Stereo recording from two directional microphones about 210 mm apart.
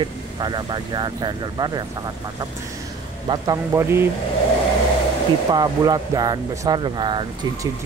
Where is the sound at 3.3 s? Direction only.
15° right (ahead or behind).